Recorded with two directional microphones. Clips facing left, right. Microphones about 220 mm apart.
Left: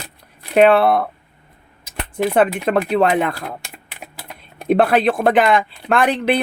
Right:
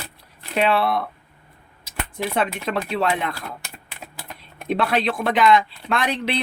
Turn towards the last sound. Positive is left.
turn(degrees=50)  # may be behind; listen again after turning